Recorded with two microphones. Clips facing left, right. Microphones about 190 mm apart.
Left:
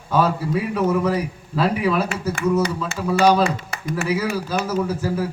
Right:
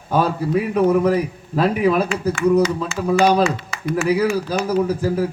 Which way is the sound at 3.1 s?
50° right (ahead or behind).